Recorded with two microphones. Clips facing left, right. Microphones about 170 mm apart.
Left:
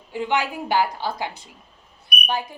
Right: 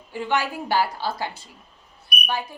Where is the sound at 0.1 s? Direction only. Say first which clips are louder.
Left 1 dB; 15° left (ahead or behind).